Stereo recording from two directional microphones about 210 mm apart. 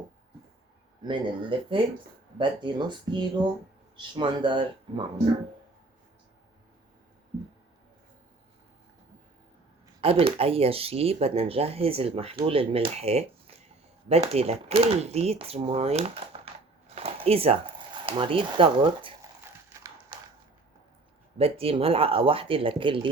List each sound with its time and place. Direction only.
1.0 s speech: 25° right (ahead or behind)
10.0 s speech: 25° right (ahead or behind)
16.9 s a sound: 30° right (ahead or behind)
18.0 s speech: 25° right (ahead or behind)
21.3 s speech: 25° right (ahead or behind)